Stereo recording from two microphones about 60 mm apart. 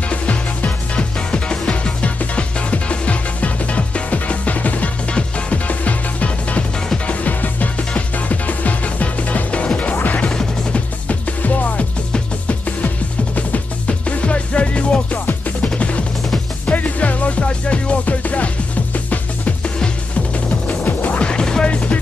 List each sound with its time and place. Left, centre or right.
0.1 s music: left